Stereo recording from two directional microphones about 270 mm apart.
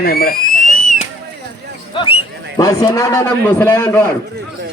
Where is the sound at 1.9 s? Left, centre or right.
Centre.